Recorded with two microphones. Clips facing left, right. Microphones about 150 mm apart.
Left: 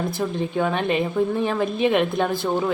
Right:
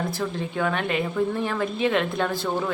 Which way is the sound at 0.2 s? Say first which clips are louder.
Left 6 dB; 20° left (ahead or behind).